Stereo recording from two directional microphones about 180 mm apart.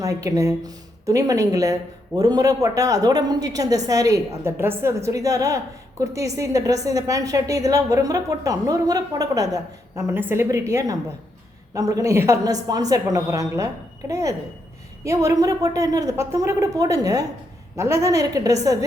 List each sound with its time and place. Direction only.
0.0 s a woman's voice: 20° right (ahead or behind)